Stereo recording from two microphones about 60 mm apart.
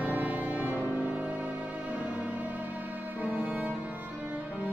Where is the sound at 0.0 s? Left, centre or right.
Right.